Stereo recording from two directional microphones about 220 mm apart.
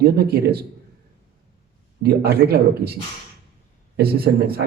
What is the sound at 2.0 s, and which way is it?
Speech, 45° right (ahead or behind).